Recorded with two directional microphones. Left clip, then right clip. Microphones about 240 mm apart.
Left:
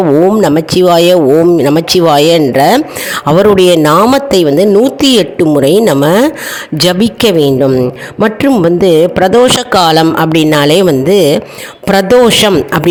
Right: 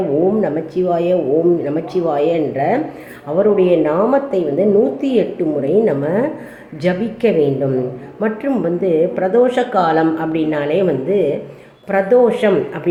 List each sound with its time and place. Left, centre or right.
0.3 s a woman's voice: left